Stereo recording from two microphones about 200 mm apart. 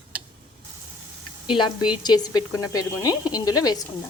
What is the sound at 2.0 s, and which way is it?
Sizzle, 20° left (ahead or behind).